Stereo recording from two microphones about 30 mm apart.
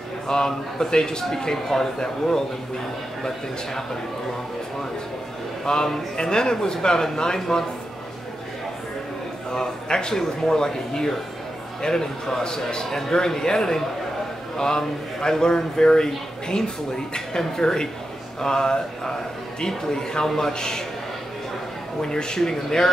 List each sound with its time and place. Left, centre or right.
0.5 s a man's voice: centre
5.7 s a man's voice: centre
7.3 s a man's voice: centre
9.5 s a man's voice: left
22.0 s a man's voice: left